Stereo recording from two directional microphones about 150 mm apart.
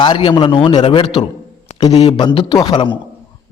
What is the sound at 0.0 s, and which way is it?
A man's voice, 30° left (ahead or behind).